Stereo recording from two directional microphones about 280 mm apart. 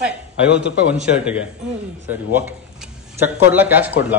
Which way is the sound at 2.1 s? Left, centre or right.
Centre.